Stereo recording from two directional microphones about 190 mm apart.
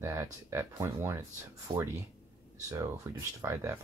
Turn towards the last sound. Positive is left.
turn(degrees=-15)  # may be behind; listen again after turning